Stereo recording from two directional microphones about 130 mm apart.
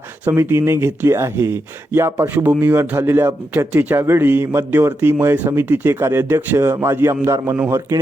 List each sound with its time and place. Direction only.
0.3 s speech: 15° right (ahead or behind)